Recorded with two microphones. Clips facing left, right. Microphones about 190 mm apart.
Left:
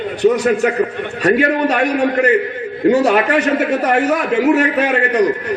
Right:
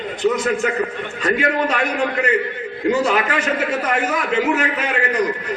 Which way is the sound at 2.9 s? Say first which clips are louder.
Left 5 dB; 65° left (ahead or behind).